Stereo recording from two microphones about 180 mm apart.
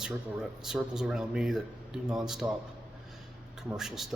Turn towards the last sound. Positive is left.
turn(degrees=0)  # may be behind; listen again after turning